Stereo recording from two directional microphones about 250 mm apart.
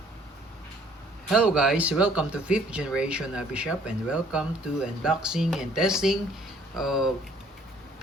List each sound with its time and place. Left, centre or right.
1.3 s speech: centre